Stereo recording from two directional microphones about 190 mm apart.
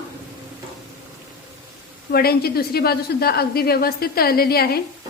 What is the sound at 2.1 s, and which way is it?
A woman's voice, 55° left (ahead or behind).